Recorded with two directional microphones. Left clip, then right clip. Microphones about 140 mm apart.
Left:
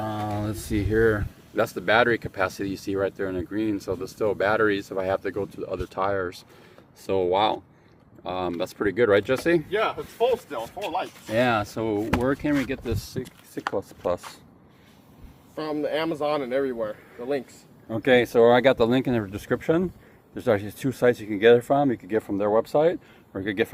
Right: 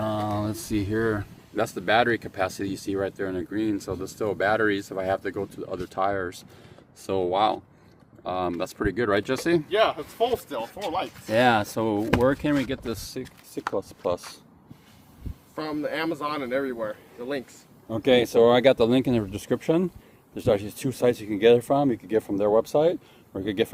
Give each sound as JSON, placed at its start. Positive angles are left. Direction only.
{"t": 0.2, "sound": "speech", "side_deg": -15}
{"t": 10.8, "sound": "speech", "side_deg": -35}
{"t": 15.5, "sound": "speech", "side_deg": -45}
{"t": 17.8, "sound": "speech", "side_deg": -20}